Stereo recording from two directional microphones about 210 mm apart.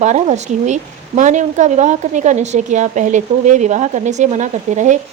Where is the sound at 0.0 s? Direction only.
35° right (ahead or behind).